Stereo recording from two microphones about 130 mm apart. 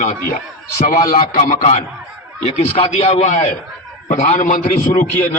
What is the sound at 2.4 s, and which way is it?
Speech, 55° left (ahead or behind).